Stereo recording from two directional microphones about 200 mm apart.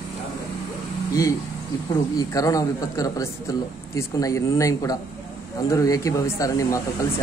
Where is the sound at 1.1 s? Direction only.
15° left (ahead or behind).